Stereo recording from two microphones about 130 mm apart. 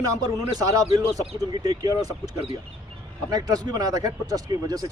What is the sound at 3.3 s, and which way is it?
Speech, 30° right (ahead or behind).